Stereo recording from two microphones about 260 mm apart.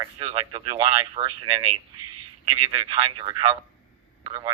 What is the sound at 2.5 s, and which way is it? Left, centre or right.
Speech, centre.